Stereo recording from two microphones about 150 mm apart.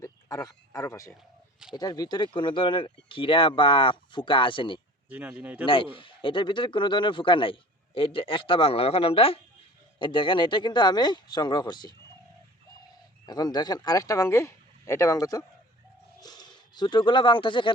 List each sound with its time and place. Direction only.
0.0 s a sound: 25° left (ahead or behind)
1.7 s speech: 25° left (ahead or behind)
5.0 s speech: 10° right (ahead or behind)
5.6 s speech: 35° left (ahead or behind)
13.2 s speech: 25° left (ahead or behind)